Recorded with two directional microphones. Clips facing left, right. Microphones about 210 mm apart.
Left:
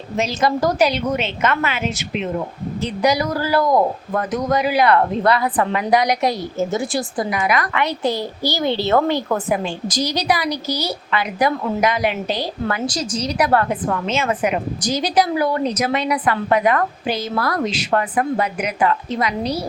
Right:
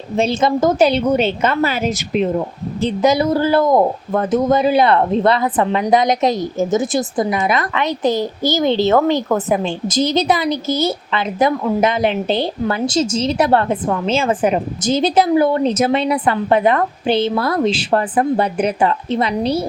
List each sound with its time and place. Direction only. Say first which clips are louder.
0.2 s a woman's voice: right 4 dB; 25° right (ahead or behind)
2.8 s a woman's voice: right 4 dB; 25° right (ahead or behind)